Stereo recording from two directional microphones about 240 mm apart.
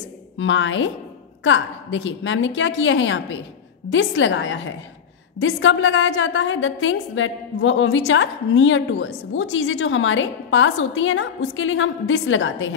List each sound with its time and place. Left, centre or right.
0.4 s a woman's voice: left